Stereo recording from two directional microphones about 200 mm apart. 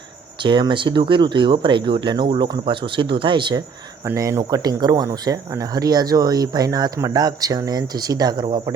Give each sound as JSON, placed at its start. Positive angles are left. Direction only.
{"t": 0.4, "sound": "speech", "side_deg": -25}